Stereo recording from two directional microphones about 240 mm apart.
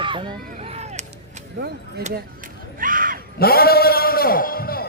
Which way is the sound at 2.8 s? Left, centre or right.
Right.